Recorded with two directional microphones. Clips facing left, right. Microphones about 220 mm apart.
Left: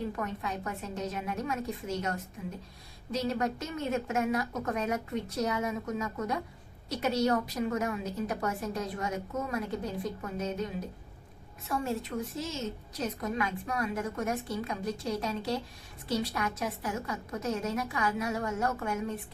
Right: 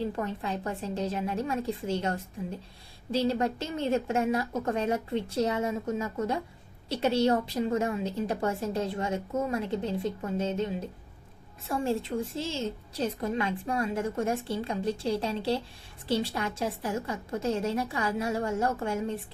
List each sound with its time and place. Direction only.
0.0 s a woman's voice: 30° right (ahead or behind)